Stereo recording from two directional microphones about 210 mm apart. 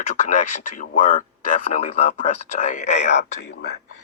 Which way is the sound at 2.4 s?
35° left (ahead or behind).